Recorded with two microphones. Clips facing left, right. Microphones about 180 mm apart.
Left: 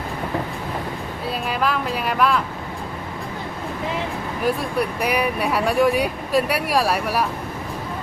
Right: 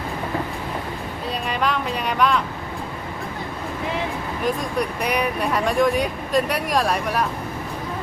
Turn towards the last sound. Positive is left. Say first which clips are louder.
# left 1 dB
turn(degrees=5)  # may be behind; listen again after turning